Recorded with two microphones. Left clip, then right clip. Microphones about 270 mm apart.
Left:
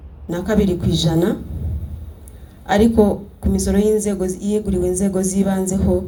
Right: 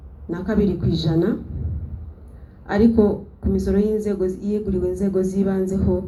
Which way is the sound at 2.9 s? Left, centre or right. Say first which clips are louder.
Left 3 dB; left.